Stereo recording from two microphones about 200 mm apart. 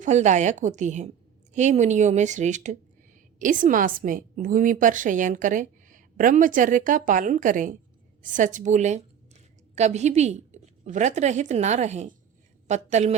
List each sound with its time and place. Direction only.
0.0 s a woman's voice: 35° right (ahead or behind)